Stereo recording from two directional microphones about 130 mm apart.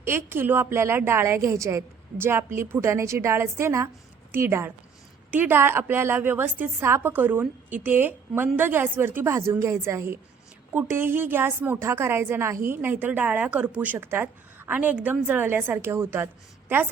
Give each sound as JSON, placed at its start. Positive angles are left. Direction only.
{"t": 0.0, "sound": "a woman's voice", "side_deg": -20}